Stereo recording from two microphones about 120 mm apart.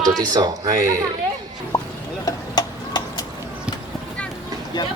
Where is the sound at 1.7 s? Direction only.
30° left (ahead or behind).